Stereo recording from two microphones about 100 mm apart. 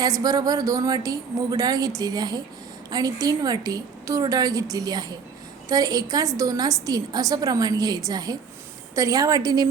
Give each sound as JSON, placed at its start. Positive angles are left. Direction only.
{"t": 0.0, "sound": "a woman's voice", "side_deg": -40}